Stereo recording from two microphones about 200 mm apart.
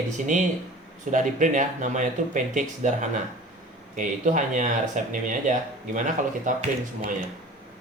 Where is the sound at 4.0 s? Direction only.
40° right (ahead or behind).